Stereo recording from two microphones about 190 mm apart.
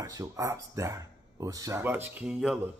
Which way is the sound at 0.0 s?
15° right (ahead or behind).